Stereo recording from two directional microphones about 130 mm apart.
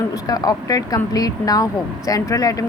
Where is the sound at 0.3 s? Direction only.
30° left (ahead or behind).